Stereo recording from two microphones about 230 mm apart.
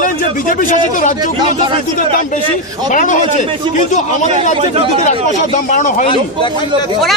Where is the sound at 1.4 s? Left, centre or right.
Right.